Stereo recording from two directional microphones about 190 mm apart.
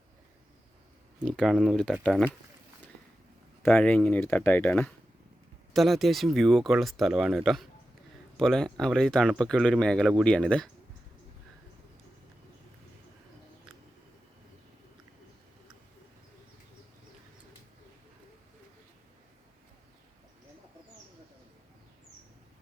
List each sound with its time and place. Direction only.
1.2 s speech: centre (ahead or behind)
3.6 s speech: 10° left (ahead or behind)